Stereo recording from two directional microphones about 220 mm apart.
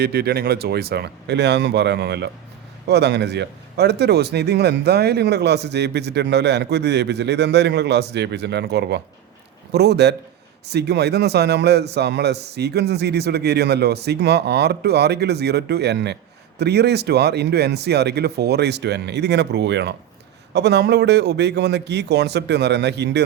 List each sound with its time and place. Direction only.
0.0 s speech: 45° right (ahead or behind)